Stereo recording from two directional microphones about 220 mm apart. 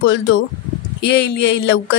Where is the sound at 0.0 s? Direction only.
55° left (ahead or behind).